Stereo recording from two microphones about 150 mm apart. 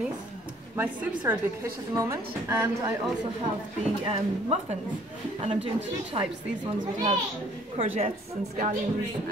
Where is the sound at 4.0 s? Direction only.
40° right (ahead or behind).